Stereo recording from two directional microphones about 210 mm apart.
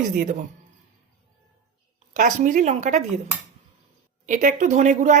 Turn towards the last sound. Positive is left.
turn(degrees=-35)  # may be behind; listen again after turning